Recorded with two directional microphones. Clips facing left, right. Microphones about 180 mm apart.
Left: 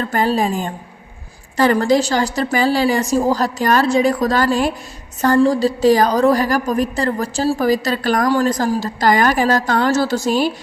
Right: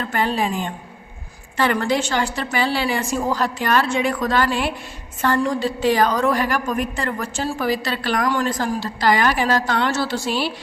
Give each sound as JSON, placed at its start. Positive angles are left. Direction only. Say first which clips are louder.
{"t": 0.0, "sound": "a woman's voice", "louder": "left 4 dB", "side_deg": 40}